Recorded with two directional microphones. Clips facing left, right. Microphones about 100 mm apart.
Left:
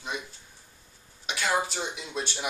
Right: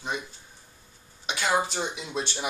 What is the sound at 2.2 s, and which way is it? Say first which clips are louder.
Speech: right 2 dB; centre (ahead or behind).